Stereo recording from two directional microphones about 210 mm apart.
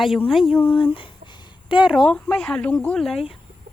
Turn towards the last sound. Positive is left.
turn(degrees=0)  # may be behind; listen again after turning